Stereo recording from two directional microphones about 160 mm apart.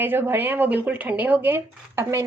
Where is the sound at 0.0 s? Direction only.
15° right (ahead or behind).